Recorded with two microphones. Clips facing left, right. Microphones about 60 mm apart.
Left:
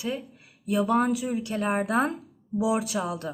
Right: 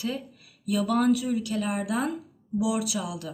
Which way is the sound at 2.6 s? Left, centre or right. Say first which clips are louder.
Left 2 dB; left.